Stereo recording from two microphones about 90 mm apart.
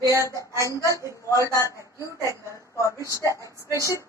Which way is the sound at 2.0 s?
35° left (ahead or behind).